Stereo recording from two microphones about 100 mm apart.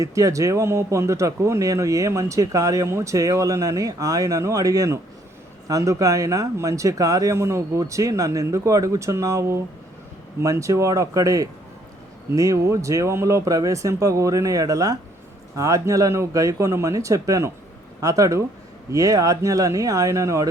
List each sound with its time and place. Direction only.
0.0 s speech: 35° right (ahead or behind)